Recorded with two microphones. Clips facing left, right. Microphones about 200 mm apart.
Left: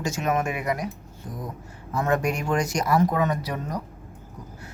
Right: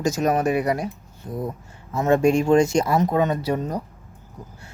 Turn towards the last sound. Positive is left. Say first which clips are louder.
# right 5 dB
turn(degrees=-30)  # may be behind; listen again after turning